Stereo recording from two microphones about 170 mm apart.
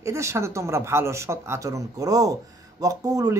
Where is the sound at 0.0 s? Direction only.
15° right (ahead or behind).